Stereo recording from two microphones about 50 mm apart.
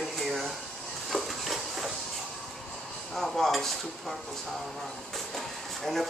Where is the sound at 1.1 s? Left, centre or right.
Centre.